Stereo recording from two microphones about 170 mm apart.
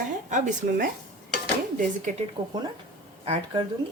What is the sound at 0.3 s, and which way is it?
Speech, 45° right (ahead or behind).